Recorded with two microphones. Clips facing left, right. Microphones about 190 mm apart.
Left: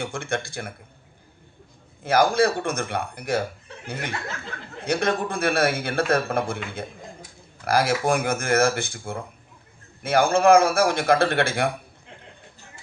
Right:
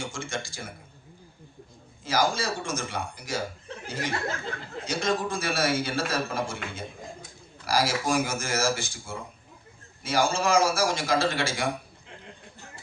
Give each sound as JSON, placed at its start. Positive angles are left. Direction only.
{"t": 0.0, "sound": "a man's voice", "side_deg": 60}
{"t": 2.0, "sound": "a man's voice", "side_deg": 60}